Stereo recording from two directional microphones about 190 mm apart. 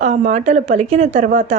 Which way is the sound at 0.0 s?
40° right (ahead or behind).